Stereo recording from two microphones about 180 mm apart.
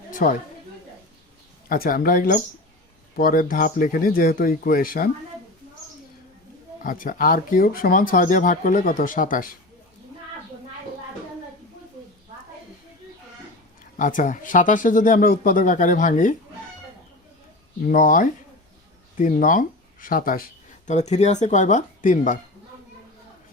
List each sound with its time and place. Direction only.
0.1 s a sound: 50° left (ahead or behind)
1.7 s speech: 50° left (ahead or behind)
6.8 s speech: 50° left (ahead or behind)
13.9 s speech: 45° left (ahead or behind)
17.8 s speech: 50° left (ahead or behind)